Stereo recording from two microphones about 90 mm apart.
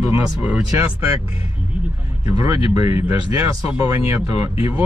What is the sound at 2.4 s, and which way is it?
Speech, 35° right (ahead or behind).